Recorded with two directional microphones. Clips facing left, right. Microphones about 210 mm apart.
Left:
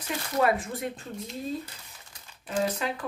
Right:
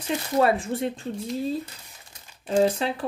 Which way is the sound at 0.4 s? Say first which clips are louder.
Right 3 dB; 30° right (ahead or behind).